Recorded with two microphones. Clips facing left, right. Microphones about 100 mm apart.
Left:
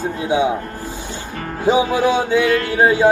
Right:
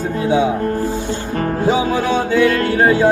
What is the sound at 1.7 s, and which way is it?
Music, 15° left (ahead or behind).